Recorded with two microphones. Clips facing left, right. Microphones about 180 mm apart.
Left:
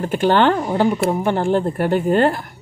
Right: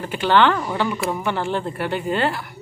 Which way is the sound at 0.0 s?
45° left (ahead or behind).